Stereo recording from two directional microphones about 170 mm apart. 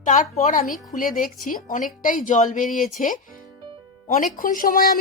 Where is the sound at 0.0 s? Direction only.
45° left (ahead or behind).